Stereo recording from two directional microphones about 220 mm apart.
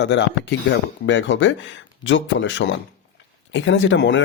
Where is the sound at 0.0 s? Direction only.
55° left (ahead or behind).